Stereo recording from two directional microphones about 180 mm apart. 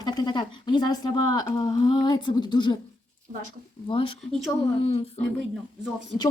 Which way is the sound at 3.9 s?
30° left (ahead or behind).